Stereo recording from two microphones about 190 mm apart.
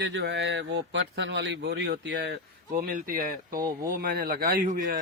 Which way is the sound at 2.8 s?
45° right (ahead or behind).